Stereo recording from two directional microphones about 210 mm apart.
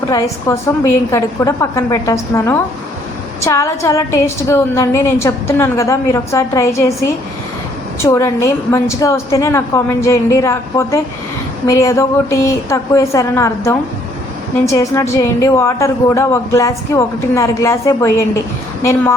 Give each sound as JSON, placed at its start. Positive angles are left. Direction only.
{"t": 0.1, "sound": "a woman's voice", "side_deg": 15}
{"t": 8.0, "sound": "a woman's voice", "side_deg": 15}